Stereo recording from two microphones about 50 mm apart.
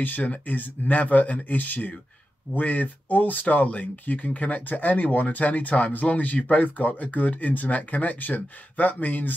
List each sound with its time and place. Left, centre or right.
0.0 s speech: left